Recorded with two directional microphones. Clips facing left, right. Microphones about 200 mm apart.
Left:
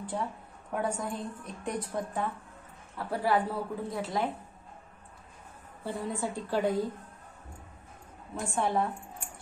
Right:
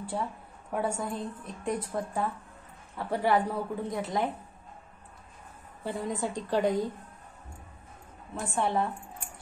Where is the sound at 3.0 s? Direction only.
20° right (ahead or behind).